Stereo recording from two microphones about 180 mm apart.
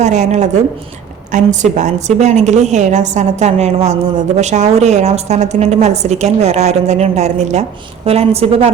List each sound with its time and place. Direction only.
0.0 s a woman's voice: 40° right (ahead or behind)